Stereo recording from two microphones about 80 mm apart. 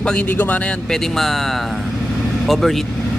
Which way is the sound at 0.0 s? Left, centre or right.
Centre.